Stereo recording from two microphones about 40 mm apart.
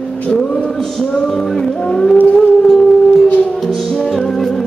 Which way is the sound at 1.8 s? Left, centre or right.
Left.